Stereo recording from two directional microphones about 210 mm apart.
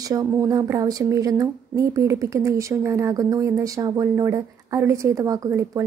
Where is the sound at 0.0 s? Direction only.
15° right (ahead or behind).